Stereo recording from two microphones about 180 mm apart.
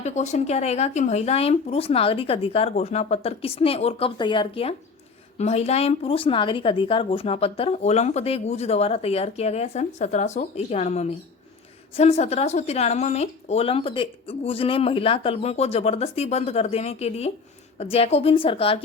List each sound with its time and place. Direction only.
0.0 s speech: 40° left (ahead or behind)